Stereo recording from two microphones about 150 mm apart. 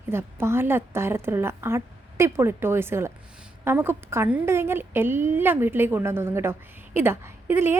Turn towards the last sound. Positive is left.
turn(degrees=-15)  # may be behind; listen again after turning